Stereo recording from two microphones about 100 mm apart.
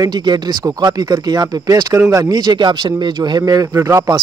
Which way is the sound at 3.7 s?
30° right (ahead or behind).